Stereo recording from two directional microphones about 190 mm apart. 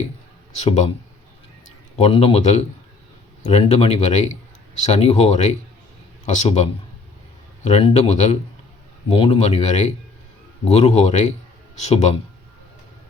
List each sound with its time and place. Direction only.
0.5 s speech: 35° left (ahead or behind)
2.0 s speech: 30° left (ahead or behind)